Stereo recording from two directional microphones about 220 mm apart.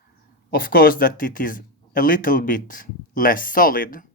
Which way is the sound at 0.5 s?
40° left (ahead or behind).